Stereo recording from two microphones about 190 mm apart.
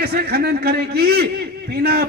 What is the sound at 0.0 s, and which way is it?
A man's voice, 55° right (ahead or behind).